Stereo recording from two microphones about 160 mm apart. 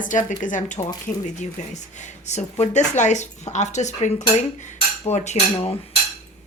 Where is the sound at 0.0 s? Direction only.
55° left (ahead or behind).